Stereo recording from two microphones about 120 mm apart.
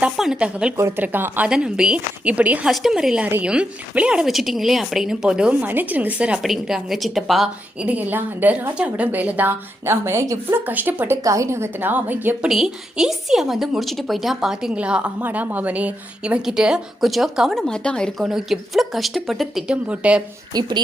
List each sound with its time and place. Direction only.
0.0 s speech: 5° right (ahead or behind)
0.8 s a woman's voice: 20° right (ahead or behind)
11.2 s speech: 25° right (ahead or behind)
12.5 s a woman's voice: 5° right (ahead or behind)
20.5 s speech: 35° right (ahead or behind)